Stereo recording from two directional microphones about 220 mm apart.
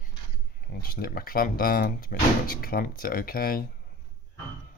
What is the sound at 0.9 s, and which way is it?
Speech, 40° left (ahead or behind).